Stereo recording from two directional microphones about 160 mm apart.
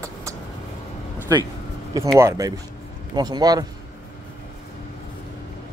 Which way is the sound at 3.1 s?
25° right (ahead or behind).